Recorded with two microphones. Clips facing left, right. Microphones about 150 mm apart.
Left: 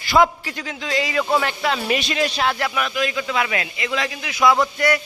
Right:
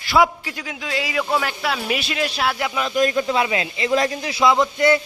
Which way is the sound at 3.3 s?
25° right (ahead or behind).